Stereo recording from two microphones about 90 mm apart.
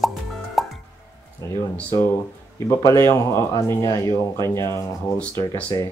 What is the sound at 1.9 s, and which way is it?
Speech, 30° left (ahead or behind).